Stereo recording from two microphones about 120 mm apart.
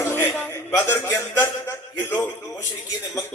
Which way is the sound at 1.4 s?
20° left (ahead or behind).